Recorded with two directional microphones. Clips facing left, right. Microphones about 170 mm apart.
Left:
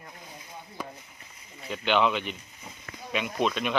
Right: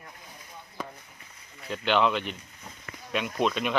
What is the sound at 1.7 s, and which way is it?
Speech, centre (ahead or behind).